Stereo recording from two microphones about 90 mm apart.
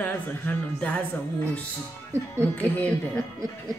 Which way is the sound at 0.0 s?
15° left (ahead or behind).